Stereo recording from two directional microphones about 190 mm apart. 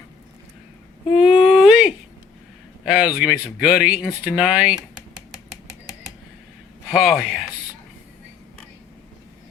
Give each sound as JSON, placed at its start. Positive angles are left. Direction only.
{"t": 1.1, "sound": "a sound", "side_deg": -5}
{"t": 2.8, "sound": "a man's voice", "side_deg": -5}
{"t": 6.9, "sound": "speech", "side_deg": 0}